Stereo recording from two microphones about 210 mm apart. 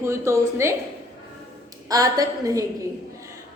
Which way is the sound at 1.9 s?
15° right (ahead or behind).